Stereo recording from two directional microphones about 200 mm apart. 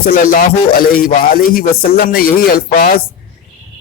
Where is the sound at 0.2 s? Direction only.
45° left (ahead or behind).